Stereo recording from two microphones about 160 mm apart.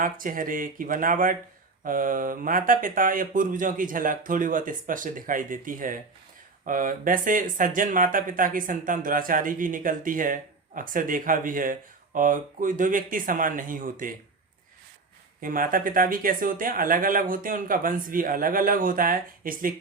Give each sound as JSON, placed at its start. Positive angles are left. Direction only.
{"t": 0.0, "sound": "speech", "side_deg": -60}
{"t": 15.4, "sound": "speech", "side_deg": -60}